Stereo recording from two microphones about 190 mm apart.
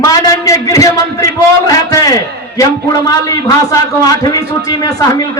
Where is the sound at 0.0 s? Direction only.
20° left (ahead or behind).